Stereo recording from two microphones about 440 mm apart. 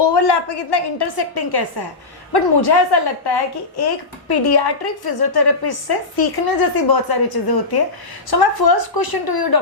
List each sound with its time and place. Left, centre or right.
0.0 s a woman's voice: left